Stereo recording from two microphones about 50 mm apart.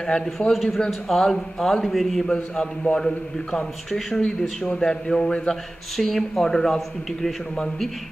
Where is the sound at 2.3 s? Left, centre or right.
Centre.